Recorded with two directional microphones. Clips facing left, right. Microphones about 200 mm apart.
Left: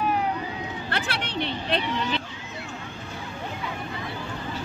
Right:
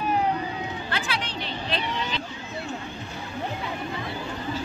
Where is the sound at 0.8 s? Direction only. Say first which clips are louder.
Even; 60° left (ahead or behind).